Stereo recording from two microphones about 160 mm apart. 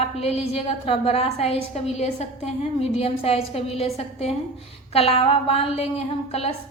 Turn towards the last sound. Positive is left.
turn(degrees=40)  # may be behind; listen again after turning